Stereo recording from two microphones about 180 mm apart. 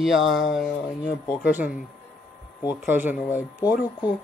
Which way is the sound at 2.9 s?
10° right (ahead or behind).